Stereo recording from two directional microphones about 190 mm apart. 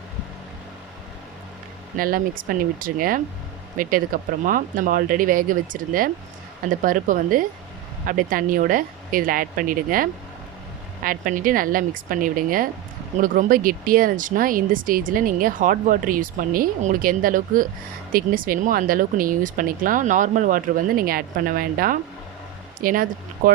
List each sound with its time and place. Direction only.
2.0 s speech: 45° right (ahead or behind)